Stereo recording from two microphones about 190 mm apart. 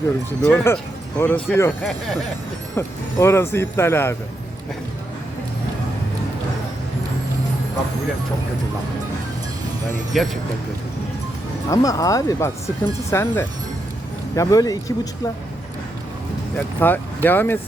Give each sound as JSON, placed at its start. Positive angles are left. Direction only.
{"t": 0.4, "sound": "speech", "side_deg": 10}
{"t": 1.8, "sound": "speech", "side_deg": 0}
{"t": 2.7, "sound": "speech", "side_deg": 15}
{"t": 10.1, "sound": "speech", "side_deg": 0}
{"t": 11.7, "sound": "speech", "side_deg": 20}
{"t": 16.6, "sound": "speech", "side_deg": 10}